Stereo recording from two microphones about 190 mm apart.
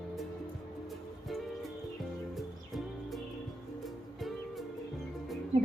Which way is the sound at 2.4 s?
Centre (ahead or behind).